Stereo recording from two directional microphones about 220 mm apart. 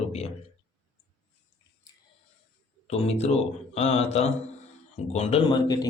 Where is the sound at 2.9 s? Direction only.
30° left (ahead or behind).